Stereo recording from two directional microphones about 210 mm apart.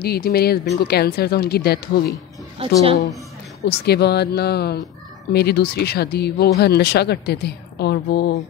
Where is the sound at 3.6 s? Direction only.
50° left (ahead or behind).